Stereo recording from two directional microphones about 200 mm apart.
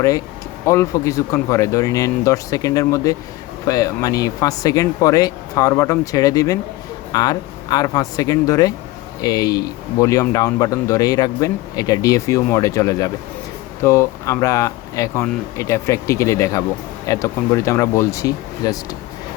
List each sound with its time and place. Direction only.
0.6 s speech: 15° left (ahead or behind)